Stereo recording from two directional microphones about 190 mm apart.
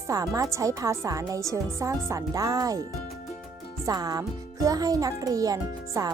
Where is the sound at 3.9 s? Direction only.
20° right (ahead or behind).